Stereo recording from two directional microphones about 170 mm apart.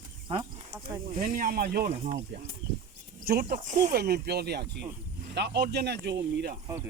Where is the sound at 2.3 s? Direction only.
90° right.